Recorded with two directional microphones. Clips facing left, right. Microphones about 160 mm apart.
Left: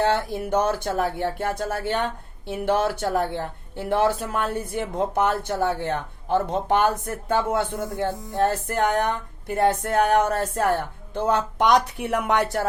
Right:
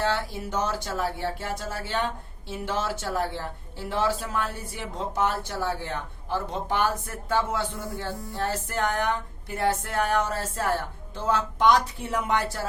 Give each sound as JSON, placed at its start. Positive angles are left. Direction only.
{"t": 0.1, "sound": "speech", "side_deg": 55}
{"t": 8.4, "sound": "music", "side_deg": 50}
{"t": 9.0, "sound": "speech", "side_deg": 55}